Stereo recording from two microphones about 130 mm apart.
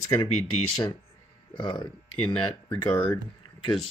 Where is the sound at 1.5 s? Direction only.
40° left (ahead or behind).